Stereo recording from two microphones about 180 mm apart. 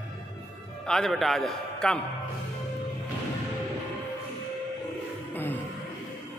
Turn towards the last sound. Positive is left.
turn(degrees=10)  # may be behind; listen again after turning